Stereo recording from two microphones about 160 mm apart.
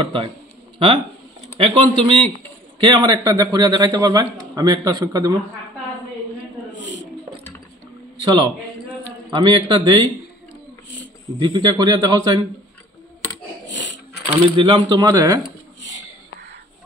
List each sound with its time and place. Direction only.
0.0 s a man's voice: 35° right (ahead or behind)
6.7 s a sound: 90° left
9.3 s a man's voice: 30° right (ahead or behind)
11.3 s a man's voice: 30° right (ahead or behind)
14.2 s a man's voice: 35° right (ahead or behind)